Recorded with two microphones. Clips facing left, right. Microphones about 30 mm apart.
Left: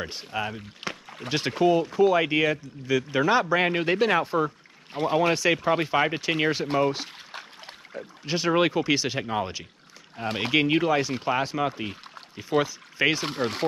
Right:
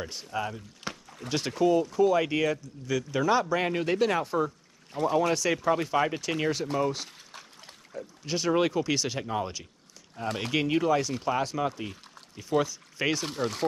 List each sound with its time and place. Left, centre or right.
0.0 s speech: left
0.8 s a sound: left
1.5 s speech: left